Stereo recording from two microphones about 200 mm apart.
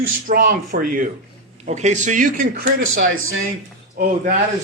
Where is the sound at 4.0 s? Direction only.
45° right (ahead or behind).